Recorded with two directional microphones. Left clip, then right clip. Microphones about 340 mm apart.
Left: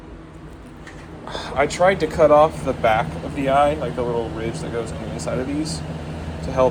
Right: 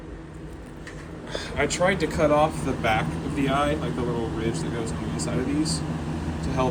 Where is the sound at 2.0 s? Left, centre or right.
Centre.